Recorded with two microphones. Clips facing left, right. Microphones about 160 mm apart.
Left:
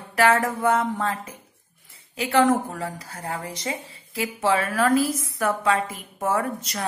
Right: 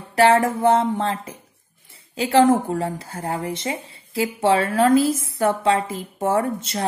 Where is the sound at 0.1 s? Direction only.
30° right (ahead or behind).